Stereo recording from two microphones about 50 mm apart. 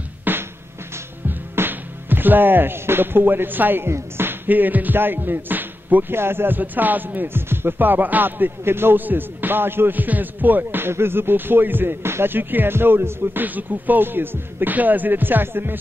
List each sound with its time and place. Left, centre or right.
0.2 s music: right
1.5 s speech: right
4.5 s speech: right
6.1 s speech: right